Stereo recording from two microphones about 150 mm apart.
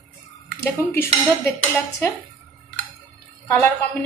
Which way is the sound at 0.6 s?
15° left (ahead or behind).